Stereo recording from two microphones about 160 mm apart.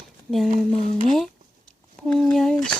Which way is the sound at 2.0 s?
5° left (ahead or behind).